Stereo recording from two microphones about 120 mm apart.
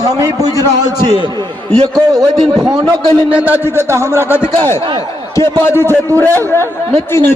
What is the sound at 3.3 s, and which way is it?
Speech, 15° right (ahead or behind).